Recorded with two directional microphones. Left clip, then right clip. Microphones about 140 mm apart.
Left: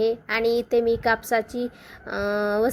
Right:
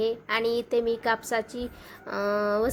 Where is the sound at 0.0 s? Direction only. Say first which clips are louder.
Left 4 dB; 15° left (ahead or behind).